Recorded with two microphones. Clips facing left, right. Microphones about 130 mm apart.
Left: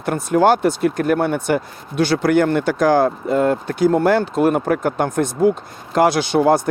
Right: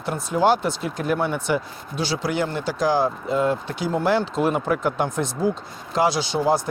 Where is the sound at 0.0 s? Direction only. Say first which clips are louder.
Left 5 dB; 55° left (ahead or behind).